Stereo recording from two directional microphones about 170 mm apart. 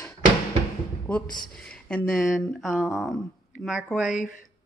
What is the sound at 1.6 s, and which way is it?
Speech, 5° left (ahead or behind).